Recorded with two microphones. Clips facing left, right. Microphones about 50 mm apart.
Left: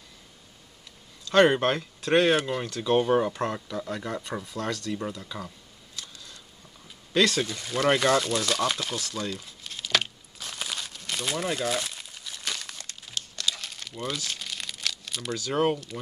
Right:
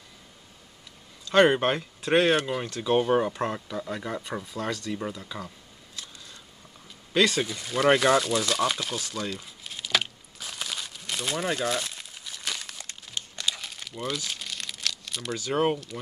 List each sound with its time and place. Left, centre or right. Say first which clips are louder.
1.2 s speech: even; centre
5.9 s a sound: even; centre
7.2 s speech: even; centre
9.1 s crumpling: even; centre
12.7 s crumpling: even; right
13.7 s crumpling: right 1 dB; centre
15.5 s speech: even; centre